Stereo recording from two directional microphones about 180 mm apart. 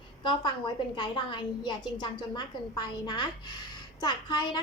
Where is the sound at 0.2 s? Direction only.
25° left (ahead or behind).